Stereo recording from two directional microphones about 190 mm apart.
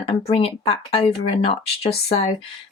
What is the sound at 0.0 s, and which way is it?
Speech, 30° left (ahead or behind).